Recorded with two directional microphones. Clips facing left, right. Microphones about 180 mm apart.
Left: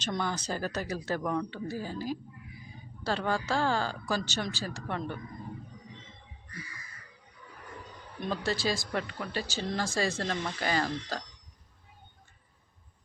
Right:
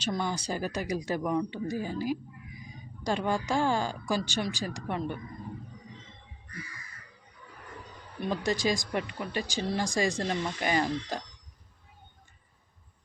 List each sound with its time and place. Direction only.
0.0 s speech: 10° right (ahead or behind)
8.2 s speech: 15° right (ahead or behind)